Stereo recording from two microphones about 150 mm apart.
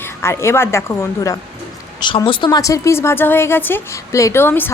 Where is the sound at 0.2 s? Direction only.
15° left (ahead or behind).